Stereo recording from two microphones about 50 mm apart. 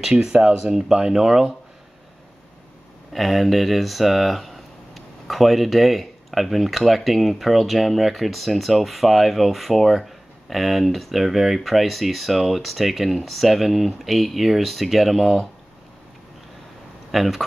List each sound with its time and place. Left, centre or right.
0.3 s speech: centre
3.1 s speech: centre
17.1 s speech: centre